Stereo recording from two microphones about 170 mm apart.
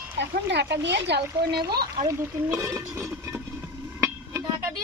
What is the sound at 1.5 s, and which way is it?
Speech, 65° right (ahead or behind).